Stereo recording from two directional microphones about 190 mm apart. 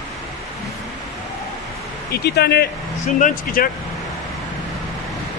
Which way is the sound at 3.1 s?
45° left (ahead or behind).